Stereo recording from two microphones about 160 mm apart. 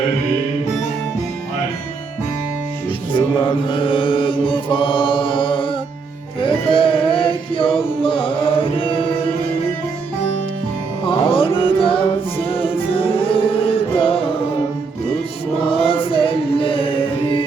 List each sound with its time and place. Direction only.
3.2 s mantra: 30° left (ahead or behind)
6.4 s music: 35° left (ahead or behind)
11.0 s music: 35° left (ahead or behind)
15.7 s music: 35° left (ahead or behind)